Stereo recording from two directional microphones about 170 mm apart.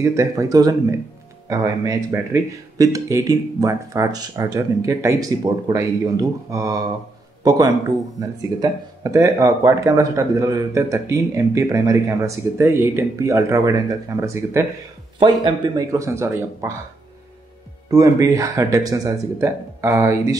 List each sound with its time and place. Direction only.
0.0 s speech: 20° right (ahead or behind)
17.8 s speech: 20° right (ahead or behind)